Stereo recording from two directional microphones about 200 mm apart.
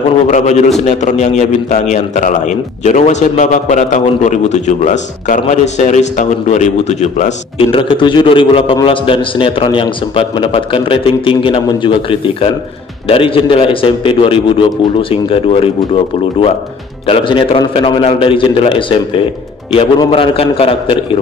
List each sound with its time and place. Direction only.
0.3 s a man's voice: 35° left (ahead or behind)